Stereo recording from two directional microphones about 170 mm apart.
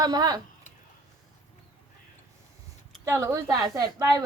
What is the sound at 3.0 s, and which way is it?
A woman's voice, 15° right (ahead or behind).